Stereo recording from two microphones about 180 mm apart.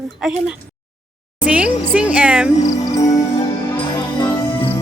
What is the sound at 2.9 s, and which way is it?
Music, 20° left (ahead or behind).